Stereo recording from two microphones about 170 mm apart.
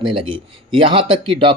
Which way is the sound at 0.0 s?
30° right (ahead or behind).